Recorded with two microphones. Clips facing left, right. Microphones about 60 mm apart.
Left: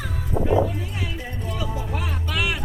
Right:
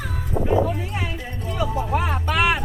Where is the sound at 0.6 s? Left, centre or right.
Right.